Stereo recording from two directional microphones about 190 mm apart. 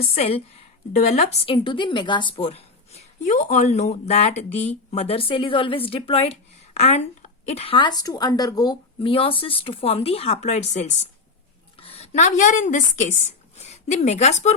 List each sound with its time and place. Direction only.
0.0 s a woman's voice: 30° left (ahead or behind)